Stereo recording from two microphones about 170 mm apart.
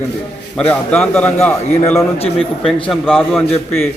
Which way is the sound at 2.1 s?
35° left (ahead or behind).